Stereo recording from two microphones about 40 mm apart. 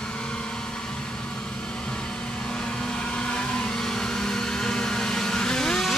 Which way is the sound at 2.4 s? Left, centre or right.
Left.